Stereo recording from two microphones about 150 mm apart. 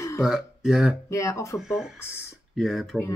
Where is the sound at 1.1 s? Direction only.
20° left (ahead or behind).